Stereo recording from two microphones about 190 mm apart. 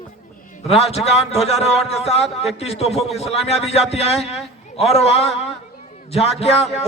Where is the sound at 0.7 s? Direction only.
30° left (ahead or behind).